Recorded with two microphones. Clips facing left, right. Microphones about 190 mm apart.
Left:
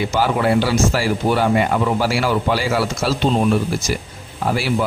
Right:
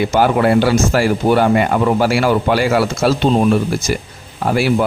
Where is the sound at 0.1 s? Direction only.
55° right (ahead or behind).